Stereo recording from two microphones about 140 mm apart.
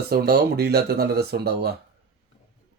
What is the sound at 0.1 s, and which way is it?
Speech, 90° right.